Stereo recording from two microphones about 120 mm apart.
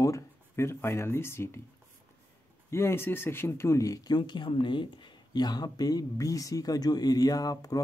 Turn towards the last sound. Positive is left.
turn(degrees=30)  # may be behind; listen again after turning